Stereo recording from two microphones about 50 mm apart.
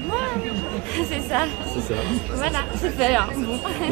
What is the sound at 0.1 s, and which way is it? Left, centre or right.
Speech, centre.